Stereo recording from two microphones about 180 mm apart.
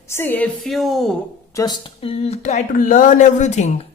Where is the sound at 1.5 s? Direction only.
20° left (ahead or behind).